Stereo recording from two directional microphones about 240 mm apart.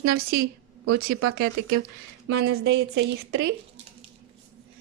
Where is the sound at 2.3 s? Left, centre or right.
Right.